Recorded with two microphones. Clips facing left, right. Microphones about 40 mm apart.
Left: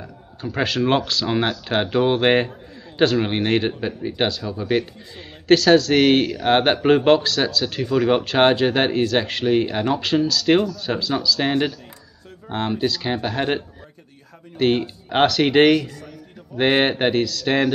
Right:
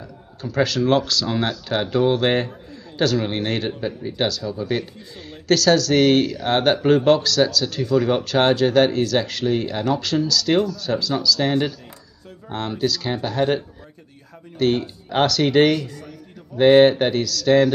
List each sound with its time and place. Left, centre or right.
0.0 s speech: left
14.6 s speech: left